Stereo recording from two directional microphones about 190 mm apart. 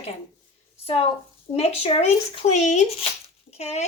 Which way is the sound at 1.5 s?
30° left (ahead or behind).